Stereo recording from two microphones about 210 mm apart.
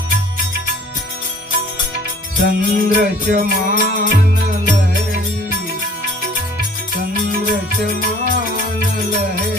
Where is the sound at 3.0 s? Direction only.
40° right (ahead or behind).